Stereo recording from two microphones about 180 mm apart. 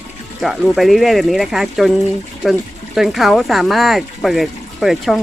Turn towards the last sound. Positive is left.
turn(degrees=0)  # may be behind; listen again after turning